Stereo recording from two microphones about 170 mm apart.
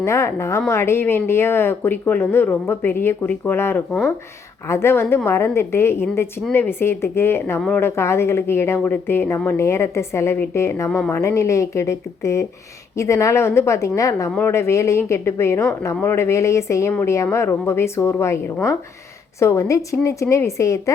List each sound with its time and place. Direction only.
0.0 s a woman's voice: 15° left (ahead or behind)